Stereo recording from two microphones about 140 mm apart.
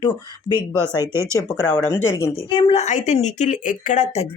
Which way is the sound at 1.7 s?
15° left (ahead or behind).